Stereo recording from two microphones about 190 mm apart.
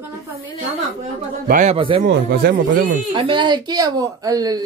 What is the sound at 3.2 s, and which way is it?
A woman's voice, 25° right (ahead or behind).